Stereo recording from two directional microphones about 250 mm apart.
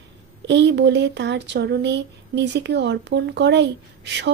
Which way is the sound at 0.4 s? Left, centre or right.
Right.